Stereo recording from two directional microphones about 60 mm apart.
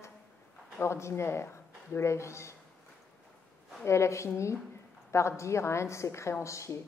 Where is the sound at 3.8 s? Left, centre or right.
Left.